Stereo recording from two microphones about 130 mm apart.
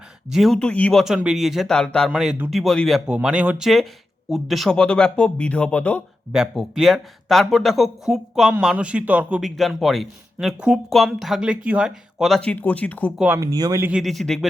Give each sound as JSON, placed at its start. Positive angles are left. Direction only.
{"t": 0.3, "sound": "speech", "side_deg": 0}
{"t": 2.0, "sound": "speech", "side_deg": -5}
{"t": 6.3, "sound": "speech", "side_deg": -5}
{"t": 12.4, "sound": "speech", "side_deg": 10}
{"t": 13.1, "sound": "speech", "side_deg": -15}
{"t": 13.4, "sound": "speech", "side_deg": -30}
{"t": 14.0, "sound": "speech", "side_deg": 0}